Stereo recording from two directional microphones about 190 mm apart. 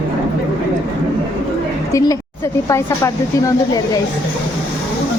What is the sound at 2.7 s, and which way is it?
A woman's voice, 15° left (ahead or behind).